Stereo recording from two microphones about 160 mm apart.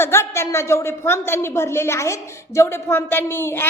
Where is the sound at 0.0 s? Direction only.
15° left (ahead or behind).